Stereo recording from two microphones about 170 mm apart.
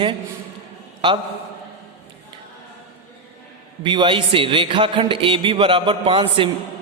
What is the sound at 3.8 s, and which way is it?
A man's voice, 25° right (ahead or behind).